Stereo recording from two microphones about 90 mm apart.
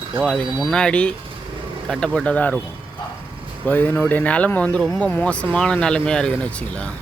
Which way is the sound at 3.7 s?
20° left (ahead or behind).